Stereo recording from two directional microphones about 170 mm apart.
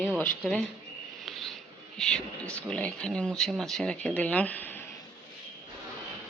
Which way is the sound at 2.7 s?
5° left (ahead or behind).